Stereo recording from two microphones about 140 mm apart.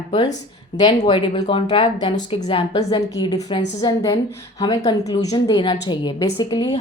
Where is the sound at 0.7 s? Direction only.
30° left (ahead or behind).